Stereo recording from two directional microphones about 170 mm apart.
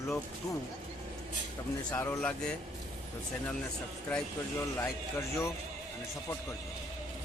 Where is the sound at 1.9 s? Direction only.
15° left (ahead or behind).